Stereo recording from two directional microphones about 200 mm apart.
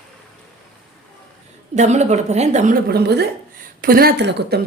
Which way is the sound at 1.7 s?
35° right (ahead or behind).